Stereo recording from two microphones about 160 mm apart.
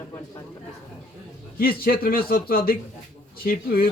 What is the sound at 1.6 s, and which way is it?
A man's voice, 70° left (ahead or behind).